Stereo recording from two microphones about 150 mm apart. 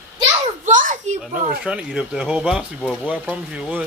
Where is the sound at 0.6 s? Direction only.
60° right (ahead or behind).